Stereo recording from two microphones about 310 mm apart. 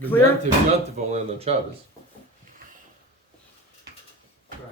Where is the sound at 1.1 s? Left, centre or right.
Centre.